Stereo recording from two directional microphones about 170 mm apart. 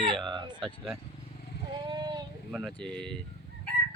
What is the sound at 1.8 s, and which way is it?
Vehicle, 25° right (ahead or behind).